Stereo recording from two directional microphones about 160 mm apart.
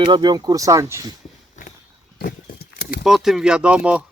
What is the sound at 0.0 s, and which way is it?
Speech, 25° right (ahead or behind).